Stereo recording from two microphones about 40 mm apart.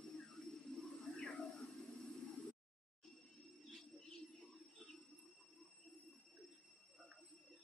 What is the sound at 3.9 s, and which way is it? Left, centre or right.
Cricket, centre.